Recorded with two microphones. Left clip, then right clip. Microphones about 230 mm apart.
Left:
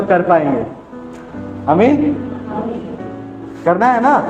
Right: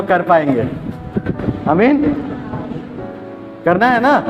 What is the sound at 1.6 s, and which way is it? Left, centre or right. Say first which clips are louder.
Speech: left 2 dB; right.